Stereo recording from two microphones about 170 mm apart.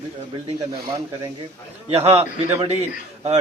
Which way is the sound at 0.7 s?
20° right (ahead or behind).